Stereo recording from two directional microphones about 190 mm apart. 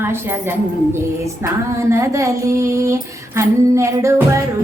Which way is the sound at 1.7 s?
15° right (ahead or behind).